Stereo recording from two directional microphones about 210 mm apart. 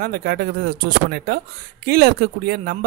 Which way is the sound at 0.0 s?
45° right (ahead or behind).